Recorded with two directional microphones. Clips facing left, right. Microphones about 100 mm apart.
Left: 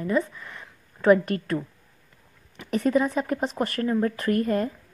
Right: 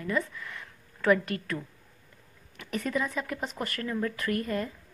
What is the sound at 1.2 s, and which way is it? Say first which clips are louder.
Speech: left 6 dB; 40° left (ahead or behind).